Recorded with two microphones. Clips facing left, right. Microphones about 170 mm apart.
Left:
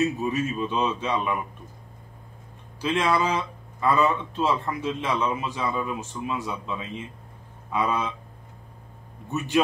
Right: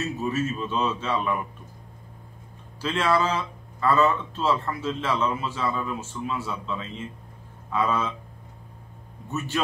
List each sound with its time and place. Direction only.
0.0 s speech: 15° left (ahead or behind)
2.8 s speech: 15° left (ahead or behind)